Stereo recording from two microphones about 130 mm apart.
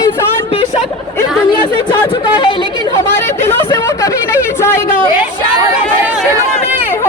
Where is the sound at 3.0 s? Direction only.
20° left (ahead or behind).